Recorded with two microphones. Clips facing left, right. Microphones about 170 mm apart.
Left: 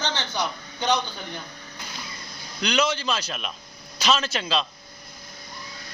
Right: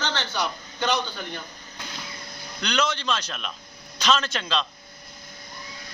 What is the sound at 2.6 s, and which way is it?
A man's voice, 10° left (ahead or behind).